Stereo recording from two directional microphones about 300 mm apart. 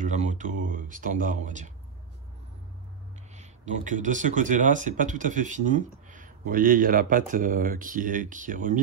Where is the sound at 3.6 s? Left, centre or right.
Right.